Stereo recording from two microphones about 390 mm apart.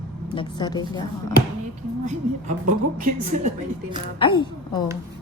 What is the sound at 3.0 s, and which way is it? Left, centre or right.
Speech, centre.